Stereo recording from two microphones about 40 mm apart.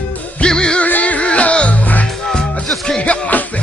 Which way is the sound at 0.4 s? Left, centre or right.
Left.